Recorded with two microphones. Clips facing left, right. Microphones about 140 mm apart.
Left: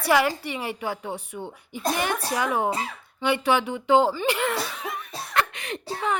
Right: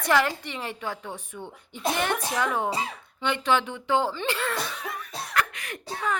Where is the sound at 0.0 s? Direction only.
10° left (ahead or behind).